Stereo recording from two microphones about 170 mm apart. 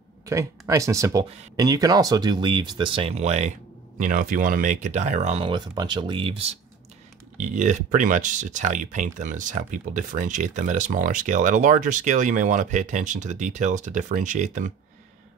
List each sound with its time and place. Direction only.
0.3 s speech: 20° right (ahead or behind); by 3.5 s 40° right (ahead or behind)
4.0 s speech: 50° right (ahead or behind); by 6.5 s 30° right (ahead or behind)
7.3 s speech: 45° right (ahead or behind)